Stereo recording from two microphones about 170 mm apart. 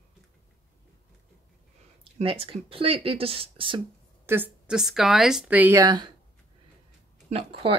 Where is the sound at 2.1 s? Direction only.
35° right (ahead or behind).